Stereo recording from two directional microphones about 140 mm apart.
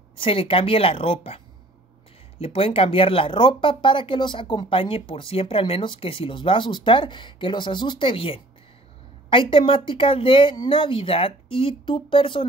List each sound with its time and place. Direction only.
0.2 s speech: 40° left (ahead or behind)